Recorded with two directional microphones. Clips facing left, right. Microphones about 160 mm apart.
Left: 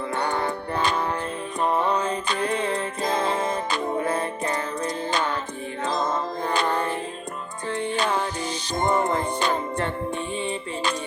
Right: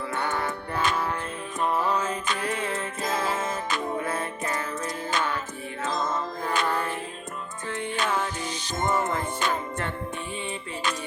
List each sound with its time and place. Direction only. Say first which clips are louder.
0.1 s music: left 3 dB; 35° left (ahead or behind)